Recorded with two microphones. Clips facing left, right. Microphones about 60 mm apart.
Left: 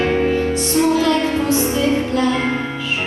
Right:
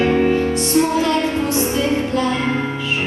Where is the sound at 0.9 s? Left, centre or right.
Right.